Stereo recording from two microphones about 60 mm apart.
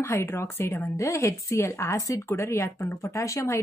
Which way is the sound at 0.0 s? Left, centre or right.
Left.